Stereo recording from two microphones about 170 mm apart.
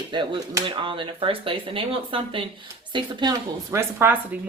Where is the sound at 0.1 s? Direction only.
25° right (ahead or behind).